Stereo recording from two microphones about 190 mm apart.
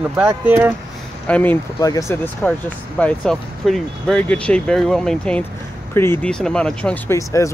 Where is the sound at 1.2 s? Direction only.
10° left (ahead or behind).